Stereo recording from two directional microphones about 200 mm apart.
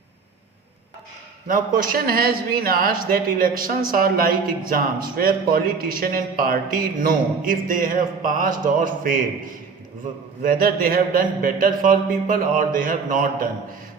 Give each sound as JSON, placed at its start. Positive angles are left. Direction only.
{"t": 1.5, "sound": "a man's voice", "side_deg": -45}
{"t": 10.4, "sound": "a man's voice", "side_deg": -45}